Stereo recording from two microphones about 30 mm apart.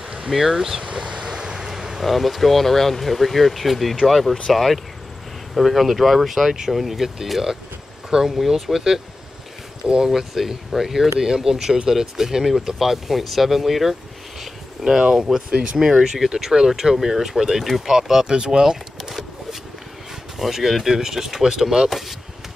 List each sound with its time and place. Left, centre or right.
0.3 s speech: centre
0.9 s vehicle: right; by 2.0 s centre
2.0 s speech: centre
8.4 s speech: centre
8.7 s speech: centre
10.1 s speech: centre
11.2 s speech: right
12.4 s speech: centre
14.4 s a sound: centre
15.0 s speech: right
15.8 s speech: centre
18.3 s speech: right
18.6 s a sound: centre
20.3 s speech: centre